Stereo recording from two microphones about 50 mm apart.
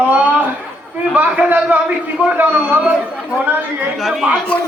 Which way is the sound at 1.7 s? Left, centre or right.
Right.